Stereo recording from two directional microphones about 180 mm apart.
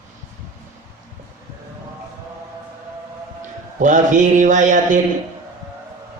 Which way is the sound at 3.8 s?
45° right (ahead or behind).